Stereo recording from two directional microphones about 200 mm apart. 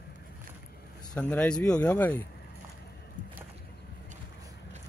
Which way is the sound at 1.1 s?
5° left (ahead or behind).